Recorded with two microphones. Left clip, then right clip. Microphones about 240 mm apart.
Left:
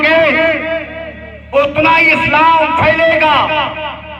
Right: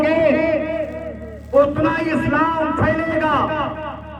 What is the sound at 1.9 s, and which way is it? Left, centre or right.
A man's voice, left.